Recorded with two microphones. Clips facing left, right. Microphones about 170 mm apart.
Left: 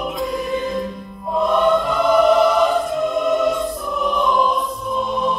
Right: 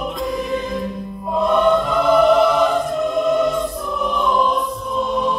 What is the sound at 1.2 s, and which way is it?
Music, centre (ahead or behind).